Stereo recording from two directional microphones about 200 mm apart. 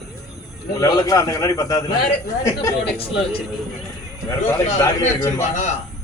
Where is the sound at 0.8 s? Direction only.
20° left (ahead or behind).